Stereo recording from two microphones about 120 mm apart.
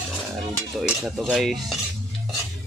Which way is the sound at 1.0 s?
Centre (ahead or behind).